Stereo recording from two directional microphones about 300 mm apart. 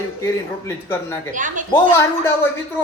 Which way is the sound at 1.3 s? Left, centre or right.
Right.